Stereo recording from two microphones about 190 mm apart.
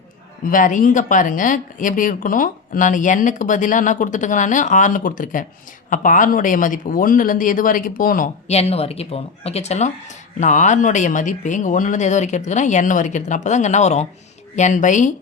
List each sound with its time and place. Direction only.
0.5 s speech: 45° left (ahead or behind)
8.4 s speech: 35° left (ahead or behind)